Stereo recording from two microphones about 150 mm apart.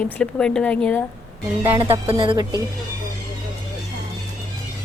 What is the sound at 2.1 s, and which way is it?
Speech, 30° right (ahead or behind).